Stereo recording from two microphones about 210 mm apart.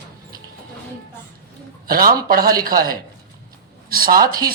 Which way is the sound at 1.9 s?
45° right (ahead or behind).